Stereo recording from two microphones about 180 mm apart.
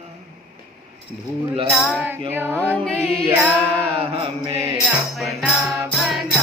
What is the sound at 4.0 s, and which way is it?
Chant, 30° right (ahead or behind).